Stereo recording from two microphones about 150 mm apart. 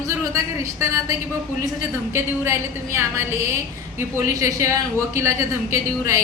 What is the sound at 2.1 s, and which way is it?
A woman's voice, 15° right (ahead or behind).